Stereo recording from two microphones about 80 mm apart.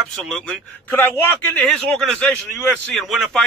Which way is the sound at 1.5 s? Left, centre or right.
Centre.